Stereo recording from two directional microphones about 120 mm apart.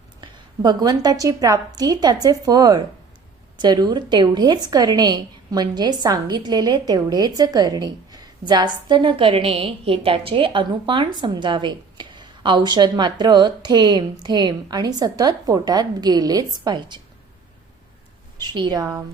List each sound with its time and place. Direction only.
0.2 s a woman's voice: 35° right (ahead or behind)
18.3 s a woman's voice: 35° right (ahead or behind)